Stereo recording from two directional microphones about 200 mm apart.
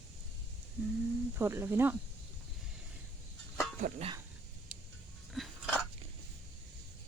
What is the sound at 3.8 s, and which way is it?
Speech, 30° right (ahead or behind).